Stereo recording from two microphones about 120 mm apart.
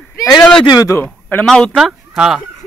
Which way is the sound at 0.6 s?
35° left (ahead or behind).